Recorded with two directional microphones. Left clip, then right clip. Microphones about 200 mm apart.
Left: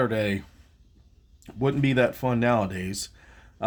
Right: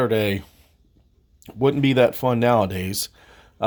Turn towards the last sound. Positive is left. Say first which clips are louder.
# right 6 dB
turn(degrees=-35)  # may be behind; listen again after turning